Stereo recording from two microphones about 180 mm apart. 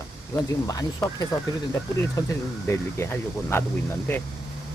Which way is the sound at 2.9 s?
15° left (ahead or behind).